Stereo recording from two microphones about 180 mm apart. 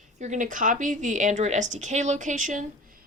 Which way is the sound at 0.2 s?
45° right (ahead or behind).